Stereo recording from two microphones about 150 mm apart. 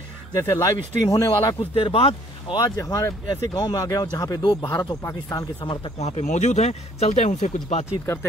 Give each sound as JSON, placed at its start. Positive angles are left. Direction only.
{"t": 0.4, "sound": "speech", "side_deg": 20}
{"t": 1.6, "sound": "speech", "side_deg": 40}
{"t": 2.5, "sound": "speech", "side_deg": 20}
{"t": 5.9, "sound": "speech", "side_deg": 45}